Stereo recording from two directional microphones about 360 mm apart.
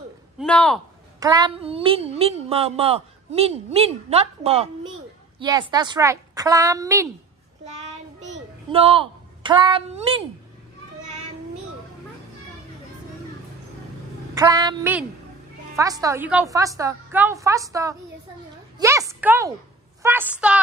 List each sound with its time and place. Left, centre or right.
0.4 s a woman's voice: centre
1.2 s speech: centre
8.2 s a sound: centre
14.3 s speech: centre
18.8 s a sound: centre
20.0 s a woman's voice: centre